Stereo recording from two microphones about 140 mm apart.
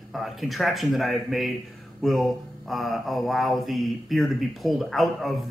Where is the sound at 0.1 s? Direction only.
Centre (ahead or behind).